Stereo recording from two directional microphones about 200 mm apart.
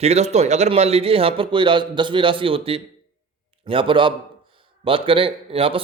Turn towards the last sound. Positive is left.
turn(degrees=-25)  # may be behind; listen again after turning